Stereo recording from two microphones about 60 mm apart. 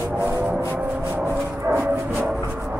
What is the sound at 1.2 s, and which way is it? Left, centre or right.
Dog, right.